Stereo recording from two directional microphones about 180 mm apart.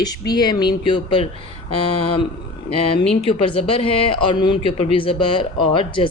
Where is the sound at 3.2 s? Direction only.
30° left (ahead or behind).